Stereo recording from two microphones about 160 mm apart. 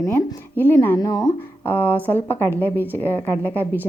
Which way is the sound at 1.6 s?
10° left (ahead or behind).